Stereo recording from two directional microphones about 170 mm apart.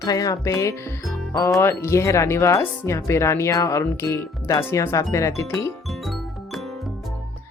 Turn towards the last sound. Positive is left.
turn(degrees=15)  # may be behind; listen again after turning